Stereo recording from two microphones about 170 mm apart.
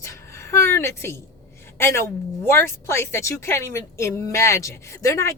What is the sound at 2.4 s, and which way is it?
Speech, 15° left (ahead or behind).